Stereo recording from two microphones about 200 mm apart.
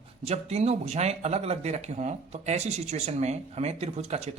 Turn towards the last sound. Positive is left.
turn(degrees=-30)  # may be behind; listen again after turning